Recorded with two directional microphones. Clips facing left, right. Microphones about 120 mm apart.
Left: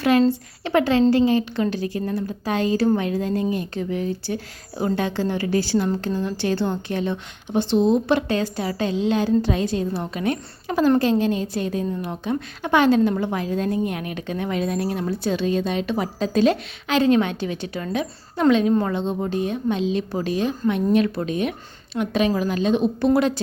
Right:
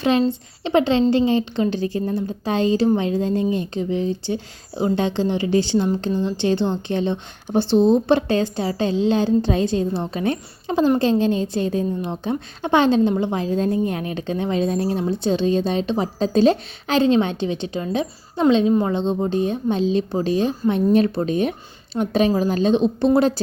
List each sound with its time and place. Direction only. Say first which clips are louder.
0.0 s speech: left 1 dB; 20° right (ahead or behind)